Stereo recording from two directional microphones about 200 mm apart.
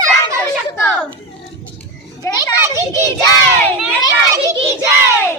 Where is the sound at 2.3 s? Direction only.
15° left (ahead or behind).